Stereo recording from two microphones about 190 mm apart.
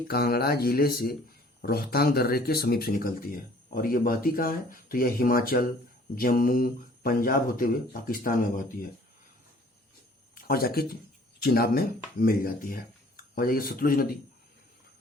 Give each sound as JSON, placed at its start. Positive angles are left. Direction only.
{"t": 0.1, "sound": "speech", "side_deg": 55}
{"t": 10.3, "sound": "speech", "side_deg": 55}